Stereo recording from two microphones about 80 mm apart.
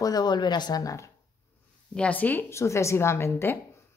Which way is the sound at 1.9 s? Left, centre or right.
Centre.